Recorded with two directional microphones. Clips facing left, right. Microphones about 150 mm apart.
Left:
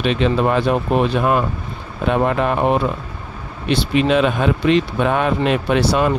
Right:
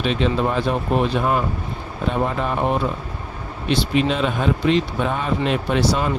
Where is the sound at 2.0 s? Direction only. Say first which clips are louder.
Left 5 dB; 70° left (ahead or behind).